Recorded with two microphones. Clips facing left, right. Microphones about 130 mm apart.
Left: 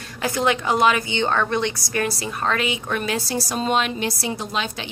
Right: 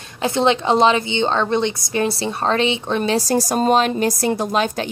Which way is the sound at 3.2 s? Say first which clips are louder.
Right 7 dB; 45° right (ahead or behind).